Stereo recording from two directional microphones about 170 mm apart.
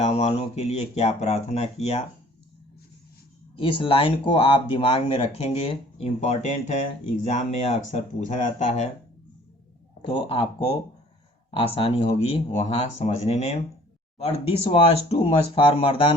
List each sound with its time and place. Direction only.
0.0 s speech: 40° left (ahead or behind)
3.5 s speech: 30° left (ahead or behind)
10.1 s speech: 30° left (ahead or behind)